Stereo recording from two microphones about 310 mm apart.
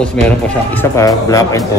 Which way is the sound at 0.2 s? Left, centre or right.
Centre.